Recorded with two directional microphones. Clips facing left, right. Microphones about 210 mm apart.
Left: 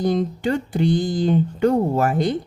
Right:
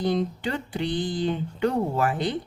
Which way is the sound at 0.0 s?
45° left (ahead or behind).